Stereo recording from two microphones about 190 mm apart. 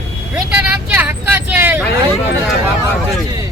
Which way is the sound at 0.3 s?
5° right (ahead or behind).